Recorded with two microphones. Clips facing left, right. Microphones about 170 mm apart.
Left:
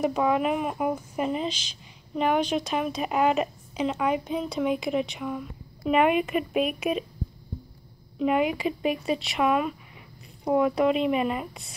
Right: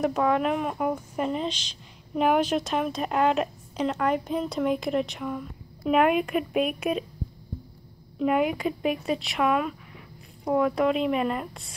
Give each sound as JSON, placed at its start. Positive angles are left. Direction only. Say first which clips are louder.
{"t": 0.0, "sound": "speech", "louder": "even", "side_deg": 5}
{"t": 8.2, "sound": "speech", "louder": "even", "side_deg": 0}